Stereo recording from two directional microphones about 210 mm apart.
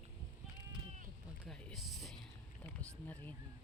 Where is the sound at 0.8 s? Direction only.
35° right (ahead or behind).